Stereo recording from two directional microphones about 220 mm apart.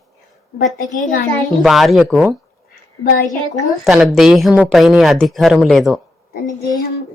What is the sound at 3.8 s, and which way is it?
Speech, centre (ahead or behind).